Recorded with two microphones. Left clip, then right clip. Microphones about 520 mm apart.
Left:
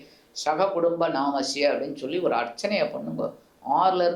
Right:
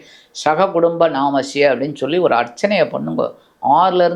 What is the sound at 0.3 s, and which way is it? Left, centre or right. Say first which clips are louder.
Speech: right 9 dB; right.